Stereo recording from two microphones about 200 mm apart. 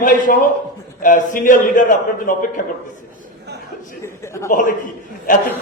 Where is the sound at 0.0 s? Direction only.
40° left (ahead or behind).